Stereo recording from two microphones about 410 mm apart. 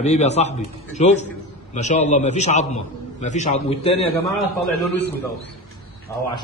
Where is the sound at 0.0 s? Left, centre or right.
Centre.